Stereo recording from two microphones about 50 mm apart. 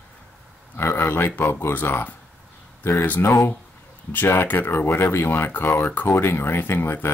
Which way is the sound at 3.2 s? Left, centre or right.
Left.